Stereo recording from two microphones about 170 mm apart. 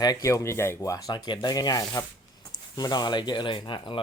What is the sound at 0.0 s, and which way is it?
Speech, 20° left (ahead or behind).